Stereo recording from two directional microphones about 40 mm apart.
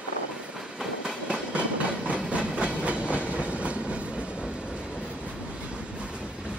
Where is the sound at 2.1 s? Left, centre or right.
Right.